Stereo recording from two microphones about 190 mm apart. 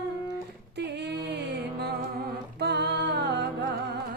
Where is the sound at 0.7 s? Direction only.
60° right (ahead or behind).